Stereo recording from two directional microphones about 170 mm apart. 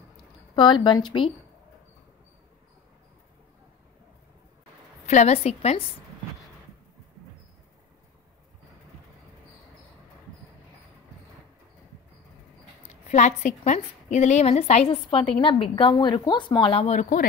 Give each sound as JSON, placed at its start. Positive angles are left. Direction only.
{"t": 0.6, "sound": "speech", "side_deg": 25}
{"t": 5.0, "sound": "a woman's voice", "side_deg": 40}
{"t": 13.1, "sound": "a woman's voice", "side_deg": 45}